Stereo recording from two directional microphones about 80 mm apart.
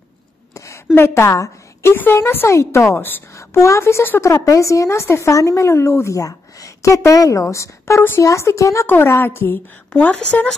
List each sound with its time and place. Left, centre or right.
0.9 s a woman's voice: left
8.8 s a woman's voice: left